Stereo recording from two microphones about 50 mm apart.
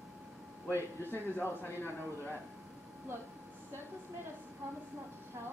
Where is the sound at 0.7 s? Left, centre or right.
Left.